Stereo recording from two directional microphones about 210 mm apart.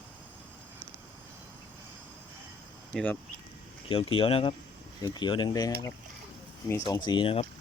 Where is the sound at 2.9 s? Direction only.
5° left (ahead or behind).